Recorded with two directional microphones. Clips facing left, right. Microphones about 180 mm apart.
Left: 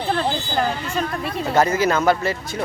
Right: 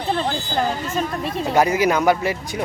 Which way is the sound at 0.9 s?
Centre (ahead or behind).